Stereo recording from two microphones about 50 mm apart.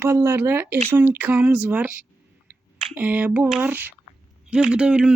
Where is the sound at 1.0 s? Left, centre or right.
Right.